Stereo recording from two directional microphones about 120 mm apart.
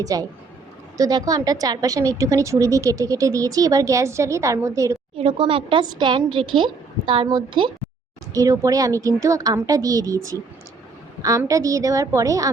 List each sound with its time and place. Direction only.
0.0 s a woman's voice: 30° right (ahead or behind)
5.1 s speech: 50° right (ahead or behind)
8.3 s a woman's voice: 30° right (ahead or behind)